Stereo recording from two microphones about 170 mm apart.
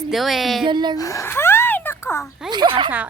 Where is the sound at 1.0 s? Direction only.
20° left (ahead or behind).